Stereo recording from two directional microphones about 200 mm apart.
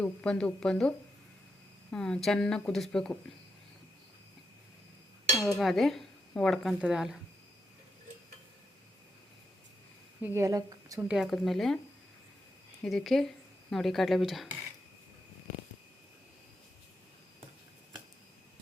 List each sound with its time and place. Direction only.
0.0 s speech: 5° left (ahead or behind)
5.4 s speech: centre (ahead or behind)
10.2 s a woman's voice: 15° right (ahead or behind)
11.1 s speech: centre (ahead or behind)
12.8 s speech: centre (ahead or behind)